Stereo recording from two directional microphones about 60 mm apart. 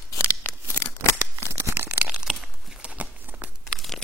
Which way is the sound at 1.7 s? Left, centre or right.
Right.